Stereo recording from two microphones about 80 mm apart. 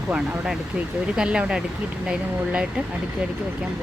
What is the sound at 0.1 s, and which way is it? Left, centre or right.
Speech, centre.